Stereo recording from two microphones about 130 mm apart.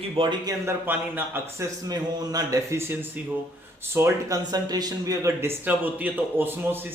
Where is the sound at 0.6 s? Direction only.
15° right (ahead or behind).